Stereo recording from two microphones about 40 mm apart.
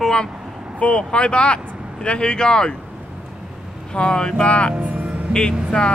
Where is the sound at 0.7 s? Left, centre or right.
Left.